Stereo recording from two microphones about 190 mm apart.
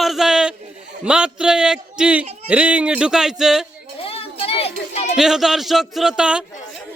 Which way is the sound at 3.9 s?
30° left (ahead or behind).